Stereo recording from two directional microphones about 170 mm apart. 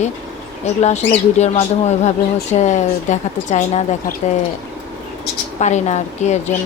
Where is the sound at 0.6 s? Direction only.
40° left (ahead or behind).